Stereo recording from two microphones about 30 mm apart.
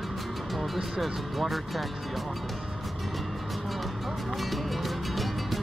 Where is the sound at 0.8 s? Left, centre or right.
Centre.